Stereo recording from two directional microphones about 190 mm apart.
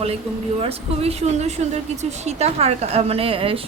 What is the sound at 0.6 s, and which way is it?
A woman's voice, 30° right (ahead or behind).